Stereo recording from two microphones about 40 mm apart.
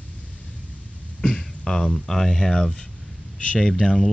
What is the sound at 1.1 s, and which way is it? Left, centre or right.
Speech, left.